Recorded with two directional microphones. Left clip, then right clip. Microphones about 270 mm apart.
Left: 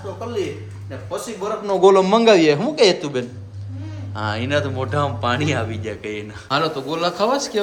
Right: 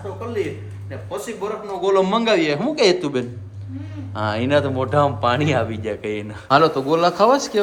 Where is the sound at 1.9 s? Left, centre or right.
Centre.